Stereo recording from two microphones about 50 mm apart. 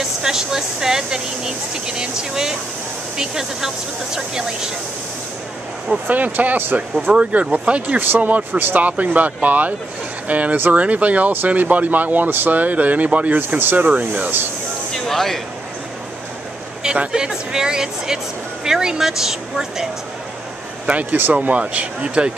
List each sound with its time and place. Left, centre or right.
0.0 s speech: centre
6.0 s speech: right
7.1 s speech: right
8.0 s speech: right
15.0 s speech: centre
16.8 s speech: centre
20.8 s speech: right